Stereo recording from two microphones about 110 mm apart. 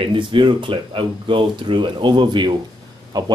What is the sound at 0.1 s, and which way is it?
Speech, 50° right (ahead or behind).